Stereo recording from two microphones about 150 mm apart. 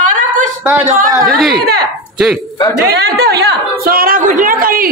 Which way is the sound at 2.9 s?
90° right.